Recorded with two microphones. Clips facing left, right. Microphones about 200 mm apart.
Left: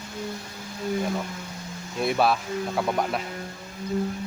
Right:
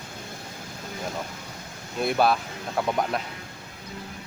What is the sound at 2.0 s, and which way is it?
Speech, centre (ahead or behind).